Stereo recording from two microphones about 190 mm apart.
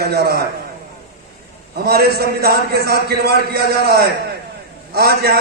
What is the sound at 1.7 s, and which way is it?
A man's voice, 55° right (ahead or behind).